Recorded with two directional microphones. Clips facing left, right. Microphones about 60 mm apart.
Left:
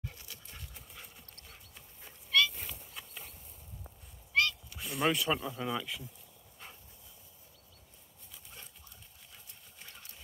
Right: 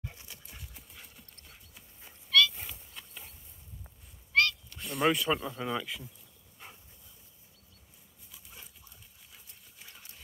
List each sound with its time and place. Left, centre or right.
0.0 s dog: right
0.5 s dog: centre
1.5 s goose: centre
4.3 s a sound: right
4.6 s speech: centre
6.6 s dog: centre
8.3 s dog: centre
9.3 s clip-clop: centre